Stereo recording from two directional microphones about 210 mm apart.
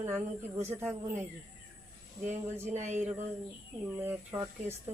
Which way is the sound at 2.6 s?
35° right (ahead or behind).